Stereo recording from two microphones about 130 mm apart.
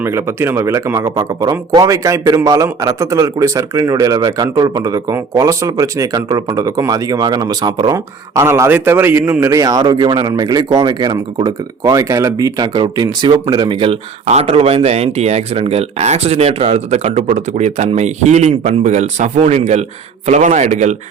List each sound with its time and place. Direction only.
0.0 s a man's voice: 20° right (ahead or behind)
8.4 s a man's voice: 20° right (ahead or behind); by 13.9 s 40° right (ahead or behind)
14.3 s speech: 55° right (ahead or behind)